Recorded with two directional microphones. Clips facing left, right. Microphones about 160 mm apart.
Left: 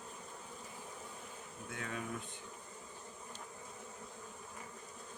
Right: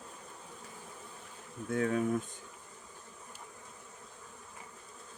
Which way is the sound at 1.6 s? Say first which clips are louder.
Right 13 dB; 45° right (ahead or behind).